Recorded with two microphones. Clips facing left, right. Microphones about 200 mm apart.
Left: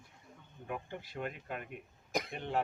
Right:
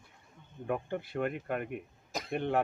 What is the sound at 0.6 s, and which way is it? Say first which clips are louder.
Speech: right 8 dB; 55° right (ahead or behind).